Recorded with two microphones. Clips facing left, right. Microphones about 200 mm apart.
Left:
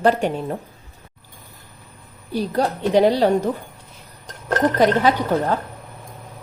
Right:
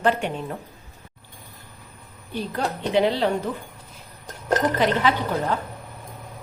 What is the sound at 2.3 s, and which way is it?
Speech, 40° left (ahead or behind).